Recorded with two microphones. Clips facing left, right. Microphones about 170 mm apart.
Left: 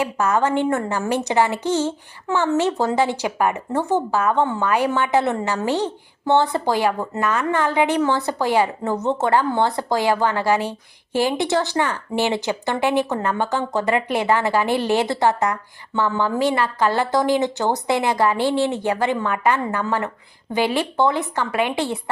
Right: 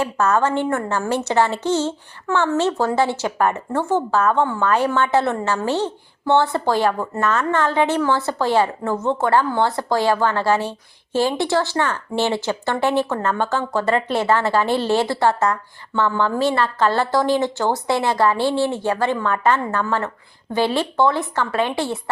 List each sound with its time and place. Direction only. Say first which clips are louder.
0.0 s a woman's voice: right 1 dB; 10° left (ahead or behind)